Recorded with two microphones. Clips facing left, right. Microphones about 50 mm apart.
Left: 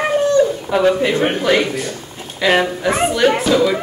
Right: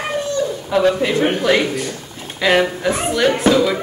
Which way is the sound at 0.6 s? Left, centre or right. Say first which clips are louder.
Left 1 dB; centre.